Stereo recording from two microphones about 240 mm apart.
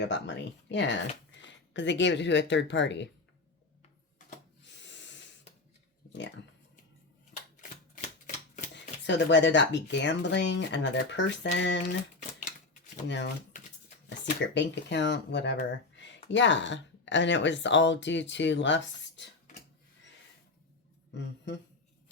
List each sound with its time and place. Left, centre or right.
0.0 s speech: left
6.1 s speech: left
8.7 s speech: left
13.1 s speech: left
14.5 s speech: left